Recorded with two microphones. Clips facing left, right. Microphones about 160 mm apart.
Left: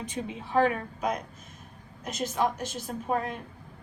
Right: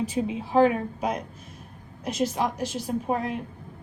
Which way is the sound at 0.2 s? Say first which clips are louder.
Right 6 dB; 20° right (ahead or behind).